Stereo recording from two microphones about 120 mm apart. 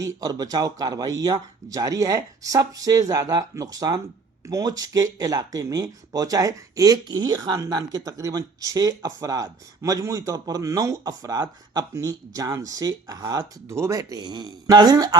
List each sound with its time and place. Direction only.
0.0 s speech: 30° right (ahead or behind)